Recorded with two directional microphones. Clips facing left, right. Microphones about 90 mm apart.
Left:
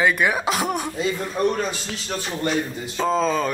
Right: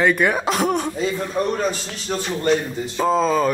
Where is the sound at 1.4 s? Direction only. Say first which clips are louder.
Left 1 dB; 30° right (ahead or behind).